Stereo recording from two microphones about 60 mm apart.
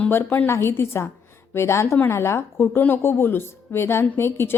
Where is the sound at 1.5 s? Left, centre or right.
Left.